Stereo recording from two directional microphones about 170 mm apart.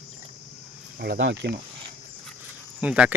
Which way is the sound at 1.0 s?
80° right.